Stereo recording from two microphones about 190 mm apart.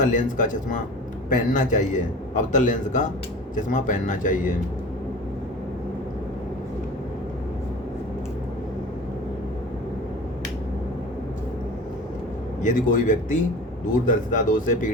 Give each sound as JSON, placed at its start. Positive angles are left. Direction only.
{"t": 0.0, "sound": "a man's voice", "side_deg": 40}
{"t": 12.6, "sound": "speech", "side_deg": 40}